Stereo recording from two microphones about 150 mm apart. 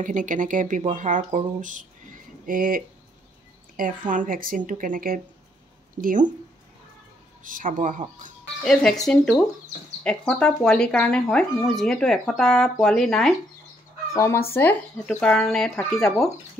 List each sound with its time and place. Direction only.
0.0 s speech: 60° right (ahead or behind)
4.1 s speech: 65° right (ahead or behind)
7.4 s speech: 60° right (ahead or behind)
9.0 s speech: 5° left (ahead or behind)
14.1 s speech: 20° left (ahead or behind); by 16.3 s 5° left (ahead or behind)